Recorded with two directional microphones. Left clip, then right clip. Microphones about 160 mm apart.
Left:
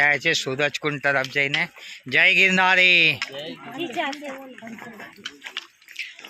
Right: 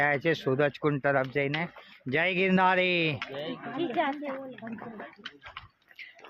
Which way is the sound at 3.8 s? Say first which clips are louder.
Left 1 dB; 15° left (ahead or behind).